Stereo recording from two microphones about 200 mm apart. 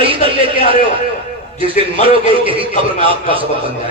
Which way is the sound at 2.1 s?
25° right (ahead or behind).